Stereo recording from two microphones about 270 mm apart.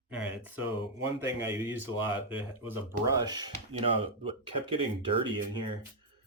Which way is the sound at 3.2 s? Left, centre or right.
Centre.